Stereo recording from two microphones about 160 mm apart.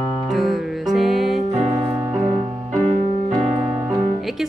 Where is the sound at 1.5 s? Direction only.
40° right (ahead or behind).